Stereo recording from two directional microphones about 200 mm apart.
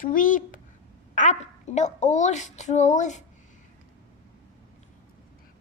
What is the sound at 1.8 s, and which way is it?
A woman's voice, 35° left (ahead or behind).